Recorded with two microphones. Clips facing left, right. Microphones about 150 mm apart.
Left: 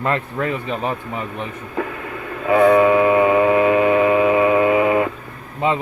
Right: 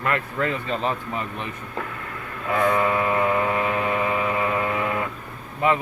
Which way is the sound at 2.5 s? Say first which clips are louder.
Left 9 dB; 65° left (ahead or behind).